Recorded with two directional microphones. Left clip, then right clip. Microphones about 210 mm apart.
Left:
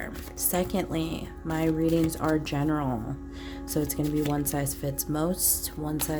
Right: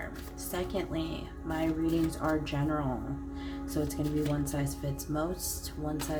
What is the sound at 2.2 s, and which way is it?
Speech, 45° left (ahead or behind).